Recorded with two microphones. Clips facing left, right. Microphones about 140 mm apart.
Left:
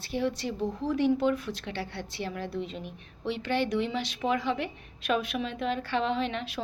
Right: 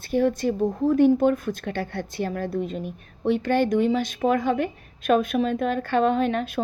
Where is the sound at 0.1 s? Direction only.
50° right (ahead or behind).